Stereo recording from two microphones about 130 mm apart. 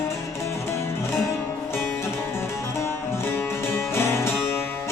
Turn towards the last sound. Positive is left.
turn(degrees=20)  # may be behind; listen again after turning